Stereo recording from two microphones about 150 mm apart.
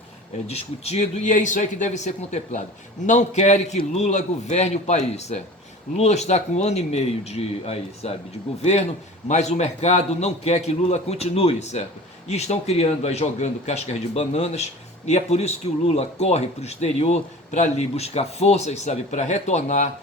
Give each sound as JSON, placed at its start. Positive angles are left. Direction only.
{"t": 0.4, "sound": "speech", "side_deg": 45}
{"t": 9.2, "sound": "speech", "side_deg": 50}